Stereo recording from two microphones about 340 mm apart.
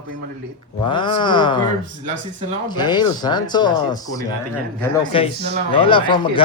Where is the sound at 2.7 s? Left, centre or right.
Centre.